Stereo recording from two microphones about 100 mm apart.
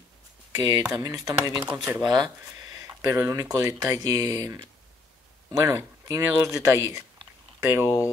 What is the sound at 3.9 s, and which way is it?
Speech, 35° right (ahead or behind).